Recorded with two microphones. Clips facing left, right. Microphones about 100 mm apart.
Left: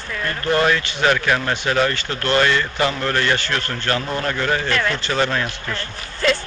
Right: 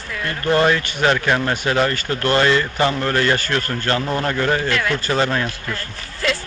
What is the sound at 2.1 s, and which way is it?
A man's voice, 30° right (ahead or behind).